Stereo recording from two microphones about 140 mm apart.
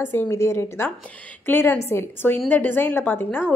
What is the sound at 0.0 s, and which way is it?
Speech, 15° left (ahead or behind).